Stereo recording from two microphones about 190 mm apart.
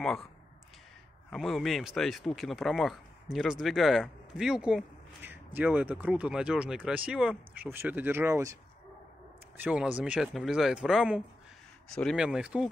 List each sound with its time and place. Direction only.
0.0 s speech: centre (ahead or behind)
1.3 s speech: centre (ahead or behind)
9.6 s speech: 5° right (ahead or behind)